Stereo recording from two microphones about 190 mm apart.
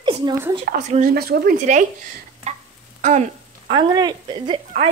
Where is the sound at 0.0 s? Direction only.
25° right (ahead or behind).